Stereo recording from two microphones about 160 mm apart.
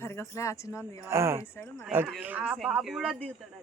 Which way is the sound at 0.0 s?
15° left (ahead or behind).